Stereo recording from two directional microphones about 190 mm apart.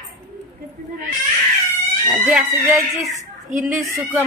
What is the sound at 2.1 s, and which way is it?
Speech, 5° right (ahead or behind).